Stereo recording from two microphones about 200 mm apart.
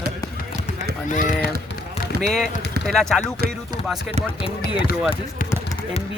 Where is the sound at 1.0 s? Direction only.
40° left (ahead or behind).